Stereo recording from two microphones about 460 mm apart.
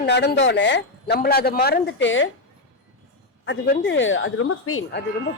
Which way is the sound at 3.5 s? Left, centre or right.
Left.